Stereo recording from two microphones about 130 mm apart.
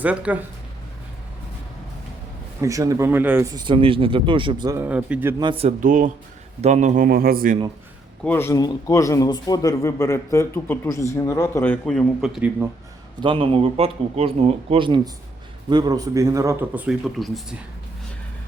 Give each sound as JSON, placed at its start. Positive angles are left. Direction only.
{"t": 0.0, "sound": "speech", "side_deg": -10}
{"t": 2.6, "sound": "speech", "side_deg": -25}
{"t": 3.5, "sound": "speech", "side_deg": -40}
{"t": 4.8, "sound": "speech", "side_deg": -10}
{"t": 5.4, "sound": "speech", "side_deg": -40}
{"t": 5.8, "sound": "speech", "side_deg": -90}
{"t": 6.6, "sound": "speech", "side_deg": -65}
{"t": 8.2, "sound": "speech", "side_deg": 15}
{"t": 8.5, "sound": "a man's voice", "side_deg": 25}
{"t": 11.6, "sound": "a man's voice", "side_deg": 10}
{"t": 13.1, "sound": "a man's voice", "side_deg": -40}